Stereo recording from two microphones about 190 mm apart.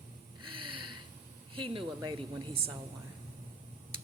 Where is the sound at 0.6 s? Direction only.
25° right (ahead or behind).